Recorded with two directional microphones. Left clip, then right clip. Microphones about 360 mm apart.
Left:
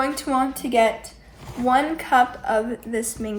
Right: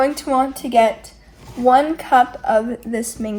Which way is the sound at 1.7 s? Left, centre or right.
Centre.